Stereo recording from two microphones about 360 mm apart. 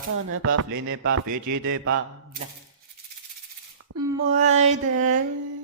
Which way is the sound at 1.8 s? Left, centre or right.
Right.